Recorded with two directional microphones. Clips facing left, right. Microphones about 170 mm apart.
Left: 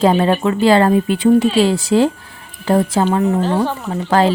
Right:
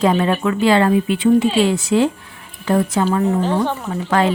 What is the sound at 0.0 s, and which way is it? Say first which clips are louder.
Speech: left 3 dB; 35° left (ahead or behind).